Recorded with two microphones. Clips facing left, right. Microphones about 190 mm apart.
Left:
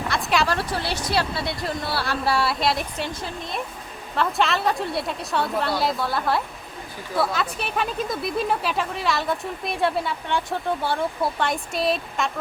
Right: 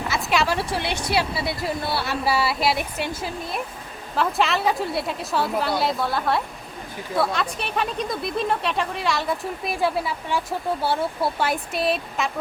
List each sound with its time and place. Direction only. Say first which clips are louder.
0.1 s a sound: even; centre (ahead or behind)
0.6 s a woman's voice: right 1 dB; 30° right (ahead or behind)
1.0 s speech: right 1 dB; 5° right (ahead or behind)